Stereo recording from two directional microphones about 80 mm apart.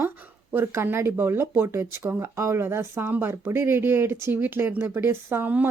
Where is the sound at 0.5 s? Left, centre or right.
Right.